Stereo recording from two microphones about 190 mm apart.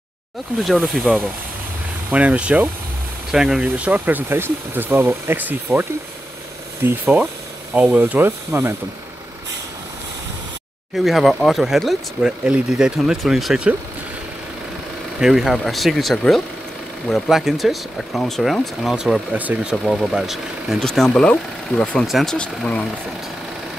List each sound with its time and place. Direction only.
0.7 s speech: centre (ahead or behind)
11.1 s speech: centre (ahead or behind)
15.1 s speech: centre (ahead or behind)